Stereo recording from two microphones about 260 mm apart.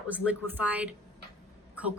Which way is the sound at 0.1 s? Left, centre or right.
Centre.